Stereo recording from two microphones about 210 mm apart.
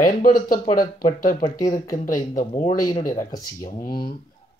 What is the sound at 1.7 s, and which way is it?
Speech, 15° left (ahead or behind).